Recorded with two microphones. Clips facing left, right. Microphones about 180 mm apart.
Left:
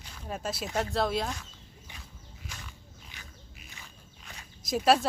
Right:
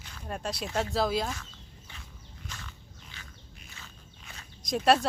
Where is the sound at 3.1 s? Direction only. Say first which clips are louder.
Even; 15° left (ahead or behind).